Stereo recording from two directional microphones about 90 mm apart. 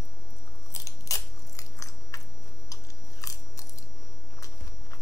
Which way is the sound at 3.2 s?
40° left (ahead or behind).